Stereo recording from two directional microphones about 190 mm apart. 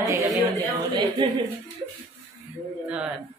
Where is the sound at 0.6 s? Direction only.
25° right (ahead or behind).